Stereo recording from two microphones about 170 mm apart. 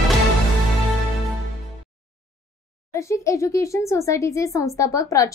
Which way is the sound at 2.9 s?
15° left (ahead or behind).